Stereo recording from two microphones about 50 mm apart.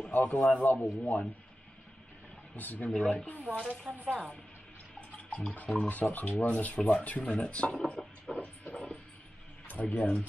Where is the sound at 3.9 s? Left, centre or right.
Right.